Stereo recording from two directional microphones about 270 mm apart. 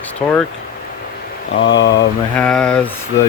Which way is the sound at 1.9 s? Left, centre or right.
Centre.